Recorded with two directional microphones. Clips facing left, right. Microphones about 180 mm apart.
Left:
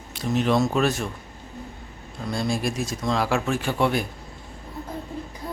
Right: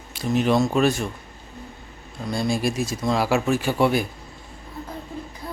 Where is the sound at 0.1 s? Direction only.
Centre (ahead or behind).